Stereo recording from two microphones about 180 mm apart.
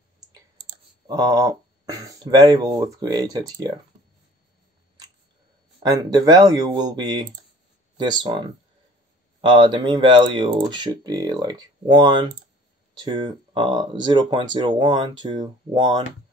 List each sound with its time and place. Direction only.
1.0 s speech: 20° right (ahead or behind)
5.8 s speech: 20° right (ahead or behind)